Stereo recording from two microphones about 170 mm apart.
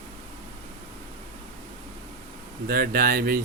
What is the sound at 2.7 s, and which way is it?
Speech, 60° right (ahead or behind).